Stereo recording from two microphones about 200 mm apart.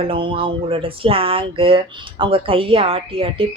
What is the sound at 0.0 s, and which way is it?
Speech, 25° right (ahead or behind).